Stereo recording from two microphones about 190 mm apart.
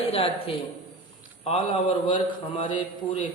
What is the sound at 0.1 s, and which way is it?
A man's voice, 30° left (ahead or behind).